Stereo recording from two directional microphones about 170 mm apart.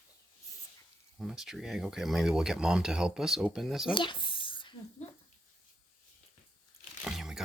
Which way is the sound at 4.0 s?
30° left (ahead or behind).